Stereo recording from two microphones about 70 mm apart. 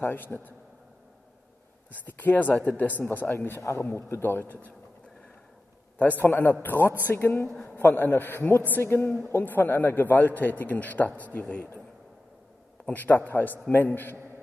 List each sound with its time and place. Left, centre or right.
0.0 s a man's voice: left
1.9 s a man's voice: left
5.9 s a man's voice: left
12.8 s a man's voice: left